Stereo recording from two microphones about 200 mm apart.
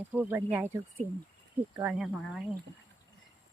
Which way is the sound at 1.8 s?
5° right (ahead or behind).